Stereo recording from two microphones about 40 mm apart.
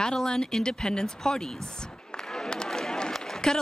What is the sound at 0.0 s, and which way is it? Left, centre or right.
A man's voice, centre.